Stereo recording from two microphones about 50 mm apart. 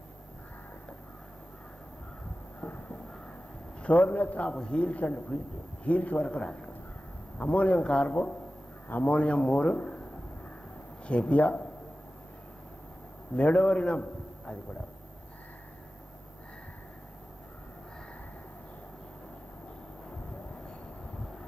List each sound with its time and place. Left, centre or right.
2.6 s a sound: left
3.8 s a man's voice: left
4.5 s speech: centre
7.3 s speech: left
8.8 s a man's voice: left
9.1 s speech: left
11.1 s speech: left
13.4 s a man's voice: left